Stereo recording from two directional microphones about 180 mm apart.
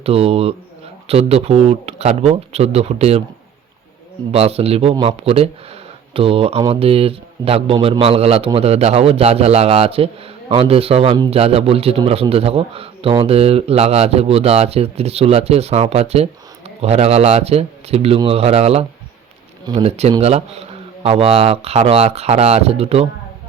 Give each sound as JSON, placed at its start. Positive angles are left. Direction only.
{"t": 0.0, "sound": "a man's voice", "side_deg": -35}
{"t": 4.3, "sound": "a man's voice", "side_deg": -35}